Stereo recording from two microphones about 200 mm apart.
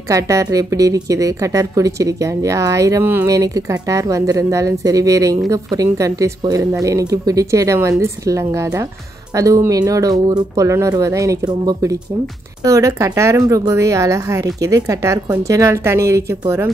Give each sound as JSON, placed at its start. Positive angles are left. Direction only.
{"t": 0.1, "sound": "a woman's voice", "side_deg": -15}